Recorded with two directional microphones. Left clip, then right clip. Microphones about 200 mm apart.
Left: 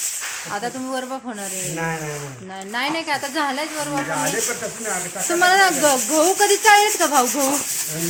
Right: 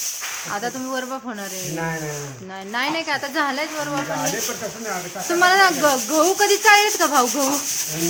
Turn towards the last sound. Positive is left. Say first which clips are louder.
# even
turn(degrees=0)  # may be behind; listen again after turning